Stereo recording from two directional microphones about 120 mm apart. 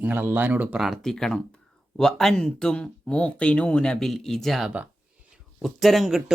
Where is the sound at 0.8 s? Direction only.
Centre (ahead or behind).